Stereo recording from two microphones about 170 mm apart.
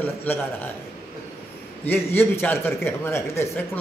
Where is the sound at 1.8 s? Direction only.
10° left (ahead or behind).